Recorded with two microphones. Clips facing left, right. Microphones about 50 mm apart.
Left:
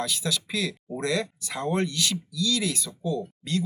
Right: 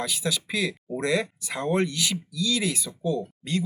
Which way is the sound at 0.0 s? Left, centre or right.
Centre.